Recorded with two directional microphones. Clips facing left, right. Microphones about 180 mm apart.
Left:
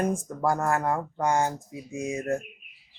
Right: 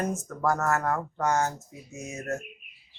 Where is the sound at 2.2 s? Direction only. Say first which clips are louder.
Left 3 dB; 35° left (ahead or behind).